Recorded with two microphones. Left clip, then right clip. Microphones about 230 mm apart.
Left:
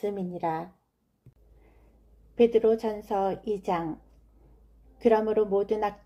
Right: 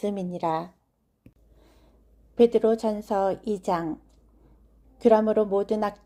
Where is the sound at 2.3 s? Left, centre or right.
Right.